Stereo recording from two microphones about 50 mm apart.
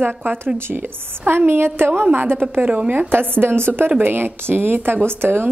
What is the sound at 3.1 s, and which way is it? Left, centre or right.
A woman's voice, right.